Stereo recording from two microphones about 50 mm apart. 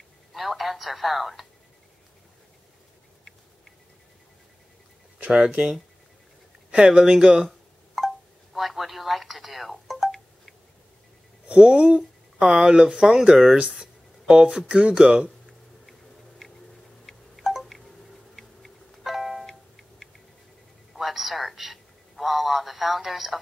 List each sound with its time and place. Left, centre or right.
0.3 s a woman's voice: centre
5.3 s speech: right
6.8 s speech: centre
7.4 s music: centre
8.5 s telephone: centre
11.4 s speech: right
15.9 s a sound: centre
18.3 s clock: centre
20.9 s a sound: centre